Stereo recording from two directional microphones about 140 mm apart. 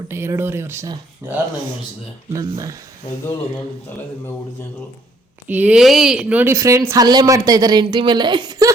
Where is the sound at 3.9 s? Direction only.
15° left (ahead or behind).